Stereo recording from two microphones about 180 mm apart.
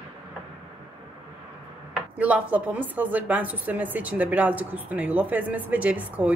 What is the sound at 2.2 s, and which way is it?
A woman's voice, 10° right (ahead or behind).